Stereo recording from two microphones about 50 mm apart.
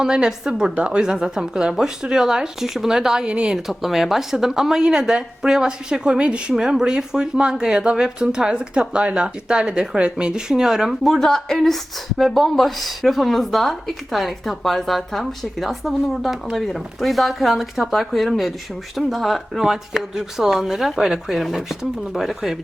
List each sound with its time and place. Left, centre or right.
0.0 s speech: centre
0.8 s speech: right
3.2 s speech: right
3.7 s speech: centre; by 10.4 s right
10.5 s speech: centre
11.0 s speech: centre